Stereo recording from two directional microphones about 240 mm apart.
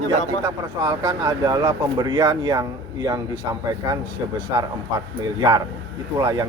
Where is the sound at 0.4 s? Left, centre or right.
Centre.